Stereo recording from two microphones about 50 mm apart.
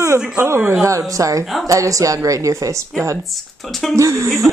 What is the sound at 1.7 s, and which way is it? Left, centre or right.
A woman's voice, right.